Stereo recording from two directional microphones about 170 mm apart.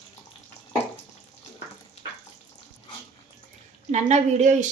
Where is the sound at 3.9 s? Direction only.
40° right (ahead or behind).